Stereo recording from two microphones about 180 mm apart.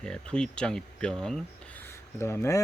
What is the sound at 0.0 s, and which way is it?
Speech, 5° left (ahead or behind).